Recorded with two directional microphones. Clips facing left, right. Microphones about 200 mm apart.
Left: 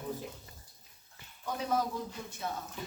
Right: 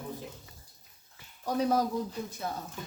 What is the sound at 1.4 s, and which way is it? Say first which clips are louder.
Speech: right 5 dB; 40° right (ahead or behind).